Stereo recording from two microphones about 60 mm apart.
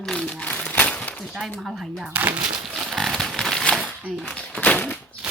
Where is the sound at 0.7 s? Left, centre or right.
Left.